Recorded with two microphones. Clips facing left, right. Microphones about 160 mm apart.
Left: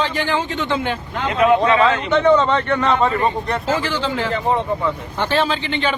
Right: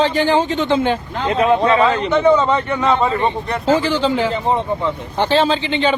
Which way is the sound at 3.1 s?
25° right (ahead or behind).